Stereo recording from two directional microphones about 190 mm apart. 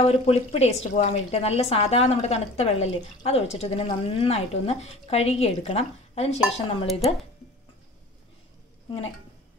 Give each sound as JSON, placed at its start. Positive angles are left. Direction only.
{"t": 0.0, "sound": "a woman's voice", "side_deg": 30}